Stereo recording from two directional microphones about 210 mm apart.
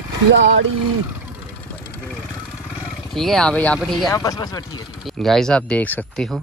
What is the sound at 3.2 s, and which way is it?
Speech, centre (ahead or behind).